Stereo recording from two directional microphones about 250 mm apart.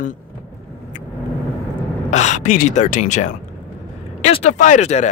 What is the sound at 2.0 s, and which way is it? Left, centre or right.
Speech, left.